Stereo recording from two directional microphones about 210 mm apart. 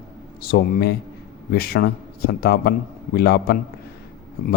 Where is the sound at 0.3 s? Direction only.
45° left (ahead or behind).